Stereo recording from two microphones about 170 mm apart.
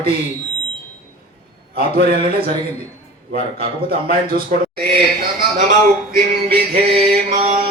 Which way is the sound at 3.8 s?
60° right (ahead or behind).